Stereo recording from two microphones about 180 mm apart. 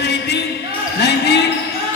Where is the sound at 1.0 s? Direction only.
70° left (ahead or behind).